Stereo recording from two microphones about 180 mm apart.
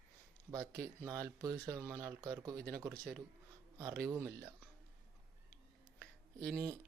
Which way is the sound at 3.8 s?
20° right (ahead or behind).